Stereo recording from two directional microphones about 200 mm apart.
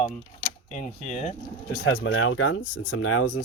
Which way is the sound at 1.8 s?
75° left (ahead or behind).